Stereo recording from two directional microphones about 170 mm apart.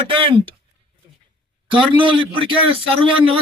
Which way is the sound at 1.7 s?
30° right (ahead or behind).